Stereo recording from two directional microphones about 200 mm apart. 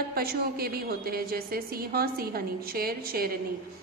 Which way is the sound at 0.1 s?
50° right (ahead or behind).